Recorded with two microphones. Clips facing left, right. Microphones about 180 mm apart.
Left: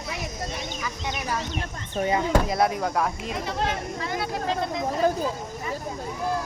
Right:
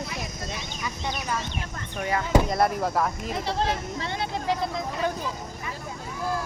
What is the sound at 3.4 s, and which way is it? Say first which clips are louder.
Speech: right 1 dB; 30° right (ahead or behind).